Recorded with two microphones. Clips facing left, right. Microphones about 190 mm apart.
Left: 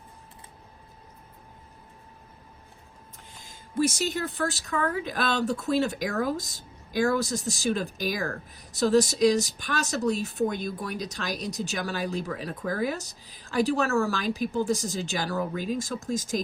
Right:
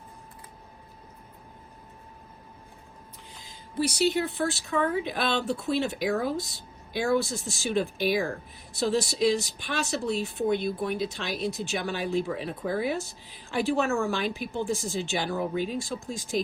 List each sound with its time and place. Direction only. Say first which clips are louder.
3.3 s speech: left 3 dB; 50° left (ahead or behind)